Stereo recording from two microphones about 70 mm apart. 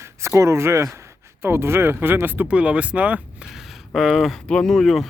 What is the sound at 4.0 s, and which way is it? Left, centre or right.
Speech, centre.